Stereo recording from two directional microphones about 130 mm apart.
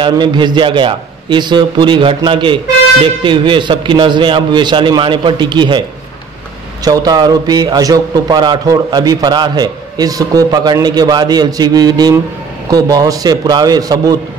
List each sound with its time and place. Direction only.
0.0 s a man's voice: 35° right (ahead or behind)